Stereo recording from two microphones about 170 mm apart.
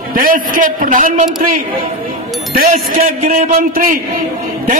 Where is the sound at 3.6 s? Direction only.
55° right (ahead or behind).